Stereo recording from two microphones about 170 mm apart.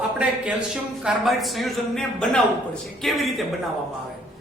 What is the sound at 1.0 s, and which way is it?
Speech, centre (ahead or behind).